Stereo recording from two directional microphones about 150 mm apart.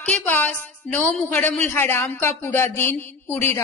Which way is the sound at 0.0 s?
10° left (ahead or behind).